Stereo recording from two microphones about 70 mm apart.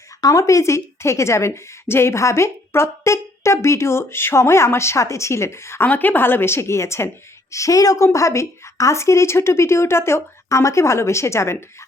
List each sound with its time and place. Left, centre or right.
0.2 s a woman's voice: left
5.9 s a woman's voice: left